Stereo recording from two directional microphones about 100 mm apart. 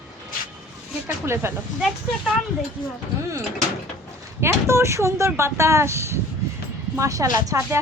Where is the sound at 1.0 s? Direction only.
25° right (ahead or behind).